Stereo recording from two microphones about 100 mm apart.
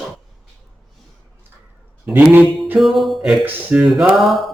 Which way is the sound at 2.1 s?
20° right (ahead or behind).